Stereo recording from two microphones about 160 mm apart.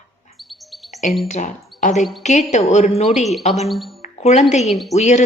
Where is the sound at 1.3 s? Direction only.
50° left (ahead or behind).